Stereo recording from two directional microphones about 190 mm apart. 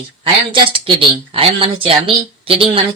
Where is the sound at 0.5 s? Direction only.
25° right (ahead or behind).